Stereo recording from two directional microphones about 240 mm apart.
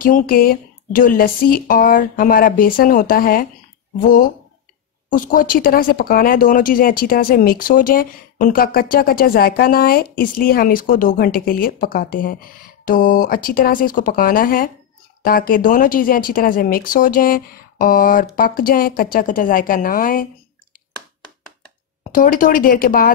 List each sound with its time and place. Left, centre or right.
0.0 s speech: left
5.1 s speech: left
22.1 s speech: left